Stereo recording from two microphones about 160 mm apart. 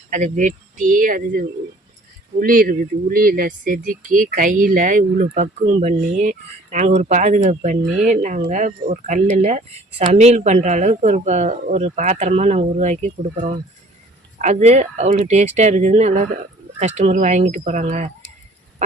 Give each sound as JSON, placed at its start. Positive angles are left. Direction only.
{"t": 0.1, "sound": "speech", "side_deg": -50}